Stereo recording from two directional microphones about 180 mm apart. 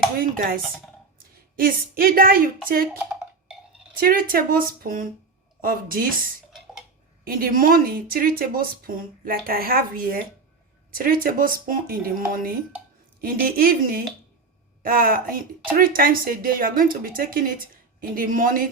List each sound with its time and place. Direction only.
0.2 s a woman's voice: 50° right (ahead or behind)
4.0 s speech: 55° right (ahead or behind)
7.3 s speech: 50° right (ahead or behind)